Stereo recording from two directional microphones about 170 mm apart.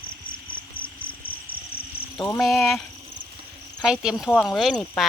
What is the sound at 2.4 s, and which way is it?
Speech, centre (ahead or behind).